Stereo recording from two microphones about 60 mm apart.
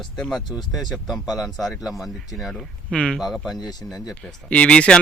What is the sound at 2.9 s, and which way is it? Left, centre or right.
Speech, centre.